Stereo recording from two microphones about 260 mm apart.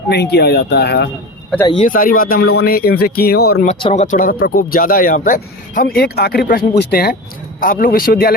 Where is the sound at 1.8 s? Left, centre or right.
Left.